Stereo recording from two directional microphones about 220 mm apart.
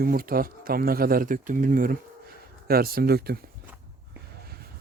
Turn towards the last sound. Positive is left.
turn(degrees=-45)  # may be behind; listen again after turning